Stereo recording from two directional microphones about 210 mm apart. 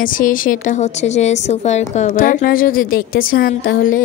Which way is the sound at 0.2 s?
40° left (ahead or behind).